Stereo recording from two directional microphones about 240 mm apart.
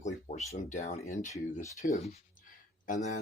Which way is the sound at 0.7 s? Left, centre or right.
Left.